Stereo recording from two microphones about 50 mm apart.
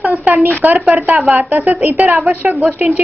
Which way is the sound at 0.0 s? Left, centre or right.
Right.